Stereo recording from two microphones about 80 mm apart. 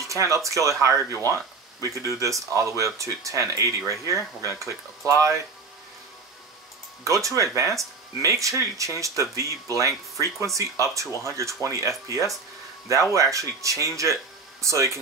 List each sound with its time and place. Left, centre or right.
0.0 s speech: right
1.1 s speech: left
1.8 s speech: right
7.1 s speech: right
13.1 s speech: right